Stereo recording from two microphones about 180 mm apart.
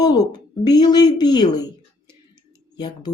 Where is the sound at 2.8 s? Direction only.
25° left (ahead or behind).